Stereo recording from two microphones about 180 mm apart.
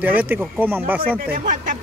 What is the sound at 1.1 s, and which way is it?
Speech, 50° right (ahead or behind).